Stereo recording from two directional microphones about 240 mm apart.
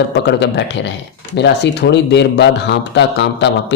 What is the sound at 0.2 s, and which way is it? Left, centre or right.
Speech, left.